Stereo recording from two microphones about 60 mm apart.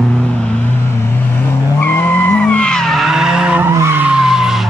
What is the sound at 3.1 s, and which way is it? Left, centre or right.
Skidding, centre.